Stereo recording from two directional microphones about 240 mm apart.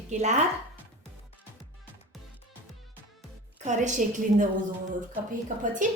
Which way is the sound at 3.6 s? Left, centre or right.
Right.